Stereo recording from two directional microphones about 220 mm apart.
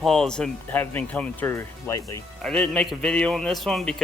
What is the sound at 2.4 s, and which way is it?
Speech, 5° left (ahead or behind).